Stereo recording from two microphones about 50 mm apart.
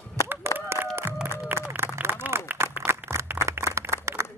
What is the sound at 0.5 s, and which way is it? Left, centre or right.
Applause, right.